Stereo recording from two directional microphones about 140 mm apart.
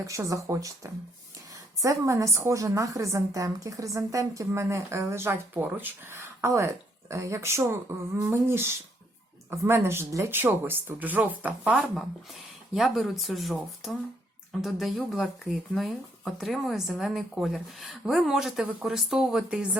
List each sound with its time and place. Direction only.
0.0 s a woman's voice: 20° right (ahead or behind); by 19.6 s 5° right (ahead or behind)